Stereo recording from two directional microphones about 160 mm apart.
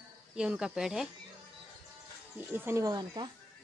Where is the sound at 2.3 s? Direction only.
15° right (ahead or behind).